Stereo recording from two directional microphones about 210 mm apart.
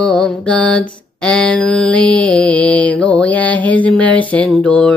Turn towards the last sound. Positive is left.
turn(degrees=5)  # may be behind; listen again after turning